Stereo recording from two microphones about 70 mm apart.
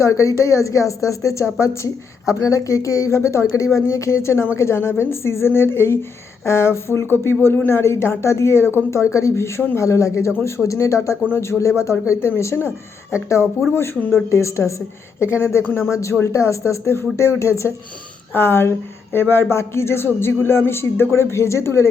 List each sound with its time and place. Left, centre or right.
0.0 s speech: left